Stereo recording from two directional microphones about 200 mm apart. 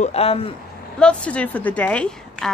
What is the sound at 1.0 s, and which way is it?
A woman's voice, 5° left (ahead or behind).